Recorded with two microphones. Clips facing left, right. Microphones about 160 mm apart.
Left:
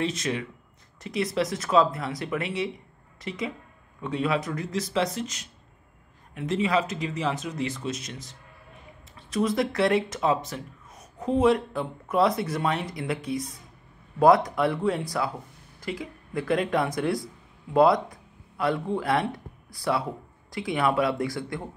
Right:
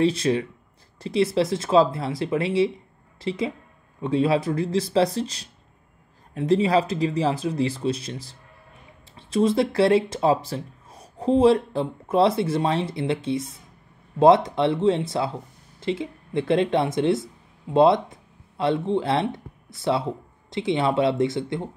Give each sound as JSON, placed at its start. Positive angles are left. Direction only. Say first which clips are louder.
{"t": 0.0, "sound": "speech", "louder": "right 7 dB", "side_deg": -30}